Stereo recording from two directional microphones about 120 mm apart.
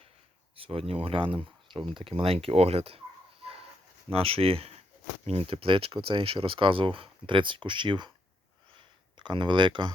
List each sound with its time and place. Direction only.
0.5 s speech: 55° right (ahead or behind)
3.4 s dog: 55° right (ahead or behind)
4.1 s speech: 55° right (ahead or behind)
9.1 s speech: 40° right (ahead or behind)